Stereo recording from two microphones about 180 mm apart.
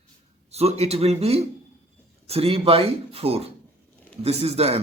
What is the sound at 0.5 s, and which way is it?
Speech, 35° right (ahead or behind).